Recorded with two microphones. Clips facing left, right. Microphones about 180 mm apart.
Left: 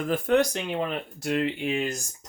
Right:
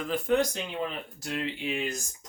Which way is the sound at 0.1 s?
70° left (ahead or behind).